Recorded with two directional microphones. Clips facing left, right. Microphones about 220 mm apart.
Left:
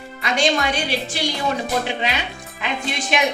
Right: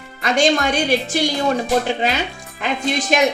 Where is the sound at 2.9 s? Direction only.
40° right (ahead or behind).